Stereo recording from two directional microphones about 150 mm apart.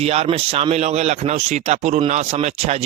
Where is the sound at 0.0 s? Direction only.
40° right (ahead or behind).